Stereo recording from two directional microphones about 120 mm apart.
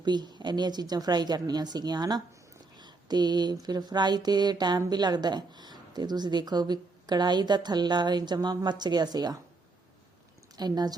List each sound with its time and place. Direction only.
0.0 s speech: 35° right (ahead or behind)
10.6 s speech: 35° right (ahead or behind)